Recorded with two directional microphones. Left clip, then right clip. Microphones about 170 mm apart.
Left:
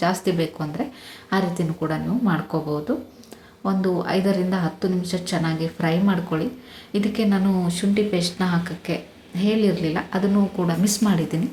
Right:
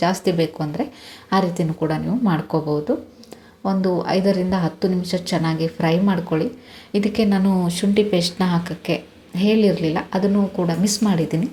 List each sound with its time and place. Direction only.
0.0 s speech: 20° right (ahead or behind)